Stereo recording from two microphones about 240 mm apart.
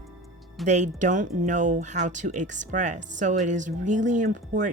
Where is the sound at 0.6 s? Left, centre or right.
Right.